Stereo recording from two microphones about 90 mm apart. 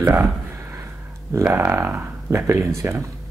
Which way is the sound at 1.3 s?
30° right (ahead or behind).